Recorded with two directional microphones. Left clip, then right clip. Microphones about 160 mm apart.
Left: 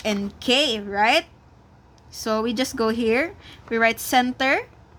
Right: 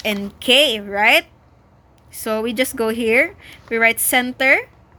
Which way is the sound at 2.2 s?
20° left (ahead or behind).